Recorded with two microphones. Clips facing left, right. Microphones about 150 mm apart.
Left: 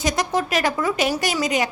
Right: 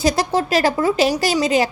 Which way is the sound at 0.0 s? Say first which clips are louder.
Right 4 dB; 30° right (ahead or behind).